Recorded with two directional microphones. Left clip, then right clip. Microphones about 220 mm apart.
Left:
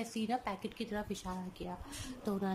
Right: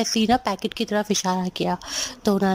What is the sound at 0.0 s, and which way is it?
A woman's voice, 40° right (ahead or behind).